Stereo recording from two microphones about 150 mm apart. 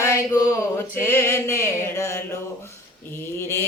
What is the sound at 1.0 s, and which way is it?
Music, 15° left (ahead or behind).